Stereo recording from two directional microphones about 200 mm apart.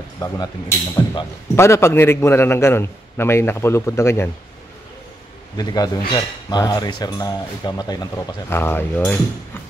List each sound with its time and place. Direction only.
0.2 s speech: 15° left (ahead or behind)
5.6 s speech: 20° left (ahead or behind)